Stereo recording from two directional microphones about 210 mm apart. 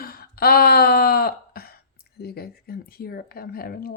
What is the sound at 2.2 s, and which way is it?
Speech, 50° left (ahead or behind).